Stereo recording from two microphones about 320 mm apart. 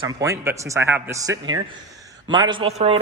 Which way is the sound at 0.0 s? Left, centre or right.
Centre.